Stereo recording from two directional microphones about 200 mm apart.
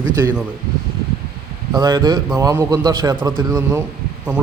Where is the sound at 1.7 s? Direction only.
20° right (ahead or behind).